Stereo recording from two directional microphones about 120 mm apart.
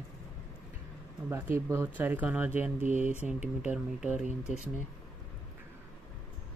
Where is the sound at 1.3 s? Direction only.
20° right (ahead or behind).